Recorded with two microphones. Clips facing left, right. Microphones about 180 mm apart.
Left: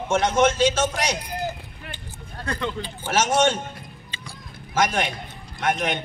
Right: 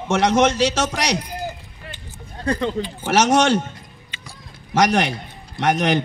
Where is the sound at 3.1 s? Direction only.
75° right (ahead or behind).